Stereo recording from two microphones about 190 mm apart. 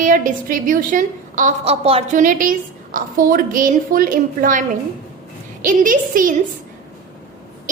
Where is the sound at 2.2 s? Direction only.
45° right (ahead or behind).